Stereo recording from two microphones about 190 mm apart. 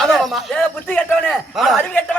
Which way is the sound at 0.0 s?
Centre (ahead or behind).